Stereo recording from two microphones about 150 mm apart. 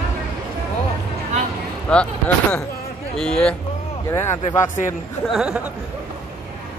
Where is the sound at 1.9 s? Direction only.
5° left (ahead or behind).